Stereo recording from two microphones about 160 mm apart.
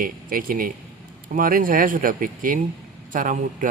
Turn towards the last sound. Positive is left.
turn(degrees=-55)  # may be behind; listen again after turning